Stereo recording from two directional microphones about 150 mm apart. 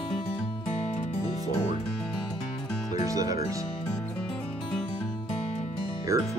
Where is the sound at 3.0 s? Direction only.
20° right (ahead or behind).